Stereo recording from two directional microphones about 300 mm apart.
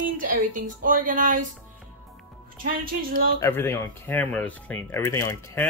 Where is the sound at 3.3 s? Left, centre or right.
Centre.